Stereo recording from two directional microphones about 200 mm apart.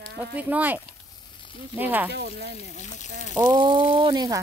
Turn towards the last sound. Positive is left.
turn(degrees=-20)  # may be behind; listen again after turning